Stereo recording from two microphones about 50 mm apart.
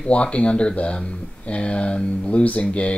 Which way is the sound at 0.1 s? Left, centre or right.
Left.